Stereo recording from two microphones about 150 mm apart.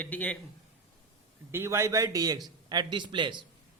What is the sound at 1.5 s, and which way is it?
A man's voice, 15° right (ahead or behind).